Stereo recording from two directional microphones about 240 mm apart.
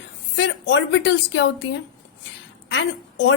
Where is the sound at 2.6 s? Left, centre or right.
Left.